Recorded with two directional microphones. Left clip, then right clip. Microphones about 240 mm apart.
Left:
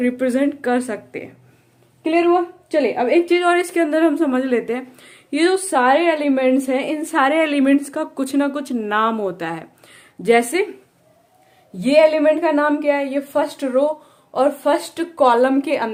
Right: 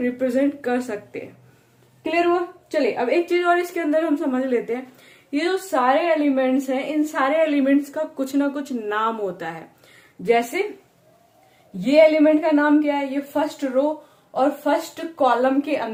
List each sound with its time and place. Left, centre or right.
0.0 s a woman's voice: left
5.3 s a woman's voice: left
11.8 s a woman's voice: left